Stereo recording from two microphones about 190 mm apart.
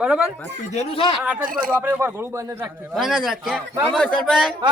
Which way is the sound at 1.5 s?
50° right (ahead or behind).